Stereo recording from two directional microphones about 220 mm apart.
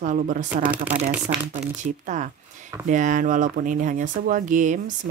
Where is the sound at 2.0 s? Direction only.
35° right (ahead or behind).